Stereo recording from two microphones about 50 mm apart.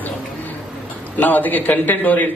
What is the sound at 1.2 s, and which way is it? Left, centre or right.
A man's voice, left.